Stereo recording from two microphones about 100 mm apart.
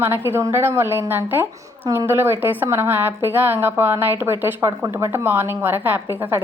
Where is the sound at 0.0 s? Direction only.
25° right (ahead or behind).